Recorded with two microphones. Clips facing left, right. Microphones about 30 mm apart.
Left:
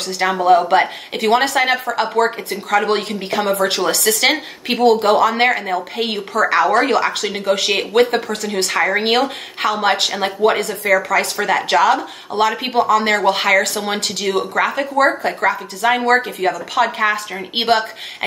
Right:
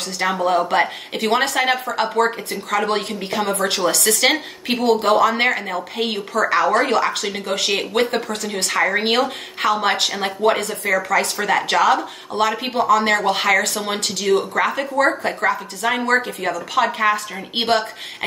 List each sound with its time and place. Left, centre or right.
0.0 s speech: centre
2.1 s speech: left
2.7 s speech: centre
9.7 s speech: centre